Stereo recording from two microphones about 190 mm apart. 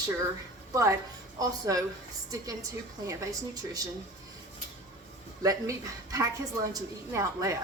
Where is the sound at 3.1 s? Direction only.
20° right (ahead or behind).